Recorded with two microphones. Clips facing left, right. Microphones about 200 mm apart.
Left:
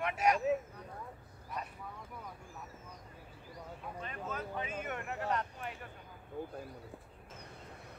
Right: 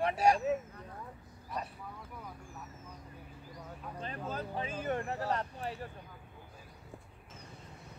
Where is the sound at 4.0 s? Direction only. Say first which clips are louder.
Right 3 dB; 30° right (ahead or behind).